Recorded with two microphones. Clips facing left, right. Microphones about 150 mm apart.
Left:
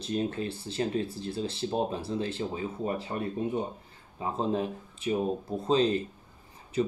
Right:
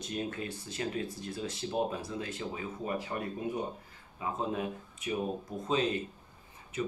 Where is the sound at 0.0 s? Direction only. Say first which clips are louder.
Left 6 dB; 30° left (ahead or behind).